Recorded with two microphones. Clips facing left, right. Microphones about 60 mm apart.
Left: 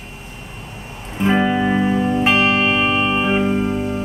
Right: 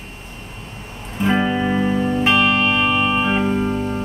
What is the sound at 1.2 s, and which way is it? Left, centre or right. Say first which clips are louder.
Music: left 2 dB; centre.